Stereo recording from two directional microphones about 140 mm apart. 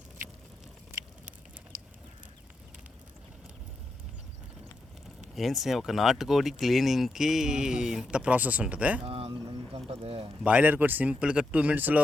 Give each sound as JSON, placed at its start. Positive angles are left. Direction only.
{"t": 5.3, "sound": "speech", "side_deg": 0}
{"t": 9.0, "sound": "a sound", "side_deg": -45}
{"t": 10.4, "sound": "speech", "side_deg": -10}